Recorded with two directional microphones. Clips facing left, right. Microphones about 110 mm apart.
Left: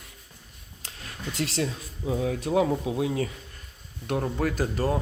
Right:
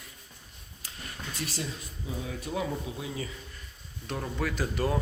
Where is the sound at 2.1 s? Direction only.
85° left; by 3.3 s 65° left (ahead or behind).